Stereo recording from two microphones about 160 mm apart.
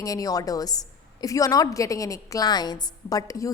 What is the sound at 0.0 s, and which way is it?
A woman's voice, 20° left (ahead or behind).